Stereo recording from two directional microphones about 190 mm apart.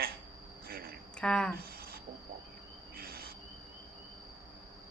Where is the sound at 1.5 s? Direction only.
50° right (ahead or behind).